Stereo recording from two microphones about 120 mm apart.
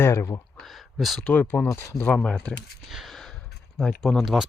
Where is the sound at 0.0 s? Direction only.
25° left (ahead or behind).